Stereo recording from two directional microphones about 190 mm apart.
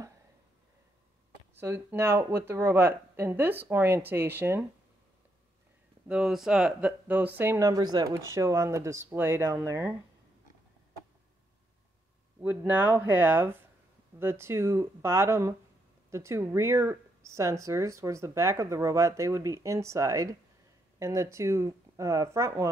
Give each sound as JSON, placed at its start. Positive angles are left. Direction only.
{"t": 1.5, "sound": "speech", "side_deg": -10}
{"t": 6.0, "sound": "speech", "side_deg": -5}
{"t": 12.4, "sound": "speech", "side_deg": -10}